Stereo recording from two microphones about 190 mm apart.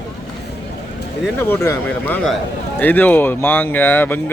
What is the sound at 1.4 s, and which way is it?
Speech, 15° left (ahead or behind).